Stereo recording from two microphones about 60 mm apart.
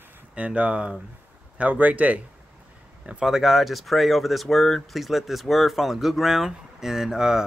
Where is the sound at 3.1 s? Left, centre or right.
Centre.